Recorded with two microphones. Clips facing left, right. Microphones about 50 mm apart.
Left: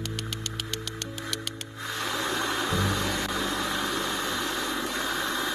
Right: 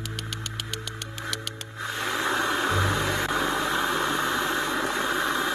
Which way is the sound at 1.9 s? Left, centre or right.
Right.